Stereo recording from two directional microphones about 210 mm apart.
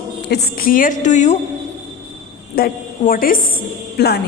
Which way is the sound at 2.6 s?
40° left (ahead or behind).